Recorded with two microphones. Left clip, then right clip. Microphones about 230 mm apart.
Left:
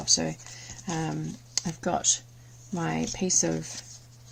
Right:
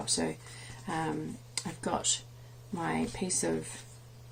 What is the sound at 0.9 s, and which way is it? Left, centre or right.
Speech, left.